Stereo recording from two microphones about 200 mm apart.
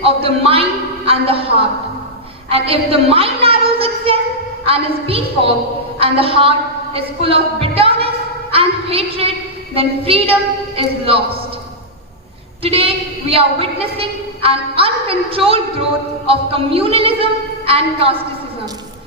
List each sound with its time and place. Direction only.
0.0 s a man's voice: 30° right (ahead or behind)
12.6 s a woman's voice: 30° right (ahead or behind)